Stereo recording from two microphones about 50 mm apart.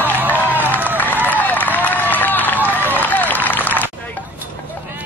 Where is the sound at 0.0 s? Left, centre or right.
Right.